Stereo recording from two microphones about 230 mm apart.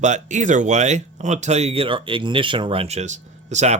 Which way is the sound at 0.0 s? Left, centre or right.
Right.